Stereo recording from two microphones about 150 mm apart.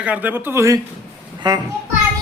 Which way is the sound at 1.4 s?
30° right (ahead or behind).